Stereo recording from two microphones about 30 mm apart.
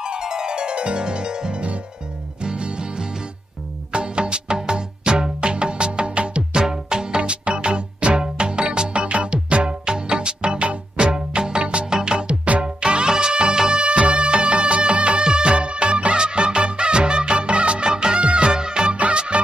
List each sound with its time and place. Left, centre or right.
0.0 s music: right
6.5 s music: right
13.7 s music: right
18.2 s music: right
18.5 s music: right